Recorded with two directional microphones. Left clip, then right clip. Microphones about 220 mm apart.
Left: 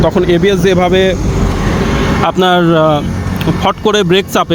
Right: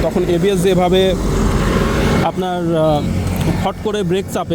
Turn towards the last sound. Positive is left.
turn(degrees=5)  # may be behind; listen again after turning